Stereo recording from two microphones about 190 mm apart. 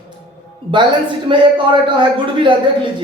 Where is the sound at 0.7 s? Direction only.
25° right (ahead or behind).